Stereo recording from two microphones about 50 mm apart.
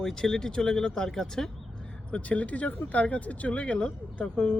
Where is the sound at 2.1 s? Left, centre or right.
Left.